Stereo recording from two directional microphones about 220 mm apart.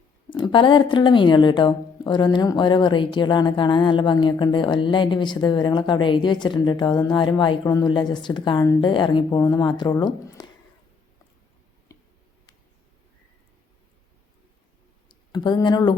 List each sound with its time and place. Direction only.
0.3 s speech: 20° left (ahead or behind)
15.1 s speech: 20° left (ahead or behind)